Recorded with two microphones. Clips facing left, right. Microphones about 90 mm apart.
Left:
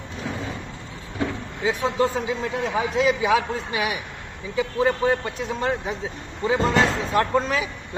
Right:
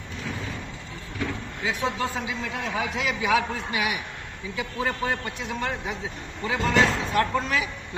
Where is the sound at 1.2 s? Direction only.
35° left (ahead or behind).